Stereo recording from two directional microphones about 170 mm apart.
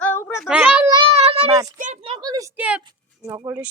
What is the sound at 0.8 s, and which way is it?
Speech, 25° right (ahead or behind).